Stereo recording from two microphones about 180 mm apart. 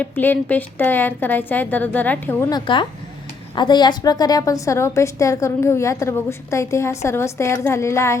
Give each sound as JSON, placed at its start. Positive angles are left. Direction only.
{"t": 0.0, "sound": "a woman's voice", "side_deg": 10}
{"t": 2.5, "sound": "a woman's voice", "side_deg": 25}